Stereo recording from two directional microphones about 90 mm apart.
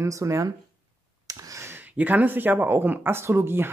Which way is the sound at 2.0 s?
20° right (ahead or behind).